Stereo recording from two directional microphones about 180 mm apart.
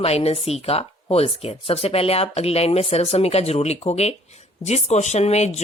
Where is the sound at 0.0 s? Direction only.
35° left (ahead or behind).